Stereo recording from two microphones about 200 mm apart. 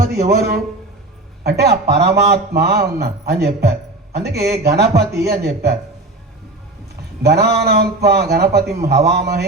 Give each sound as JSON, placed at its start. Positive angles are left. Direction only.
{"t": 0.0, "sound": "speech", "side_deg": -50}
{"t": 7.2, "sound": "speech", "side_deg": -55}